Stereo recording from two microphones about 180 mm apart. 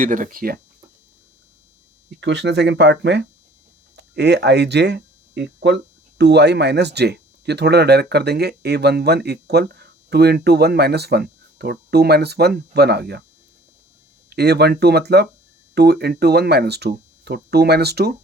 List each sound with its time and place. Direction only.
0.0 s speech: 50° right (ahead or behind)
2.0 s speech: 75° right (ahead or behind)
14.3 s speech: 65° right (ahead or behind)